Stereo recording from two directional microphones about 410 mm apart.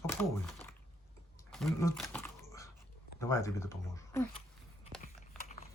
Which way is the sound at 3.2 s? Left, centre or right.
Centre.